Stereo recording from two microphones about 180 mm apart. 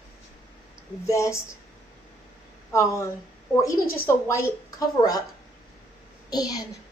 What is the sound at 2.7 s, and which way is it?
Speech, 15° left (ahead or behind).